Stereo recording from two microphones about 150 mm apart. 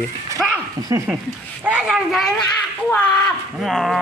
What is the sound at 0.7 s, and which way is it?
Speech, 25° right (ahead or behind).